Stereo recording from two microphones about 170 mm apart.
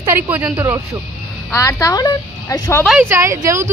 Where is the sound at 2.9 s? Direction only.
5° right (ahead or behind).